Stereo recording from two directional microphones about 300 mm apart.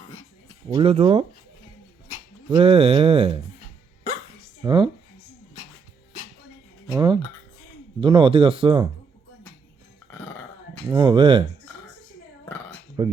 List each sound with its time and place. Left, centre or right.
0.7 s speech: centre
2.6 s speech: centre
4.6 s speech: centre
6.9 s speech: centre
10.8 s speech: centre
13.0 s speech: centre